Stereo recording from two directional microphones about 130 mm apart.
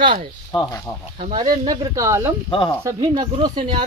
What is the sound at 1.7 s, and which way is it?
Speech, 25° right (ahead or behind).